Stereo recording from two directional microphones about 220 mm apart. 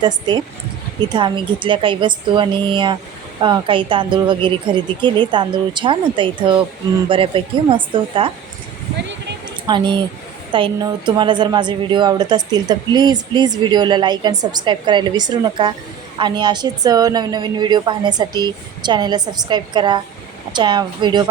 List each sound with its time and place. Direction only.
0.0 s a woman's voice: 20° right (ahead or behind)
9.6 s a woman's voice: 20° right (ahead or behind)